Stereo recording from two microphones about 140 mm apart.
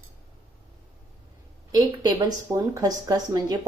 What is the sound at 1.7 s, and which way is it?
Speech, 30° right (ahead or behind).